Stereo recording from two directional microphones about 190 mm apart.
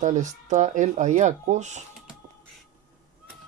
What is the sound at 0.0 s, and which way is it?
Speech, 40° right (ahead or behind).